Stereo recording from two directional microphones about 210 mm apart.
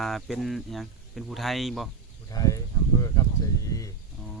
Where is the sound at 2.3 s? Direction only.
15° left (ahead or behind).